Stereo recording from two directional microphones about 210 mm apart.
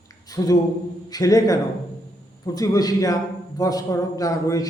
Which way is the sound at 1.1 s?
15° left (ahead or behind).